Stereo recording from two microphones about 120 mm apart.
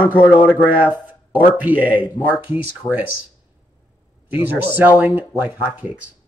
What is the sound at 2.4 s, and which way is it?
Speech, 15° right (ahead or behind).